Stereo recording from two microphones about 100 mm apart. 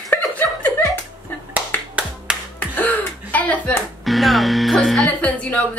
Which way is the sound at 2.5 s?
15° left (ahead or behind).